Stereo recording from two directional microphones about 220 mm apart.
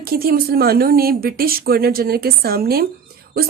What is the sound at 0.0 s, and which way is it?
Speech, 45° right (ahead or behind).